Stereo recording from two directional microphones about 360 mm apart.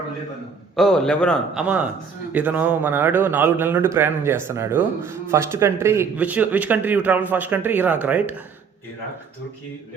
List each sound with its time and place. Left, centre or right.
0.8 s a man's voice: centre